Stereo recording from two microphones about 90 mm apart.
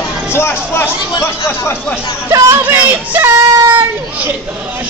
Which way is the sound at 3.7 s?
20° right (ahead or behind).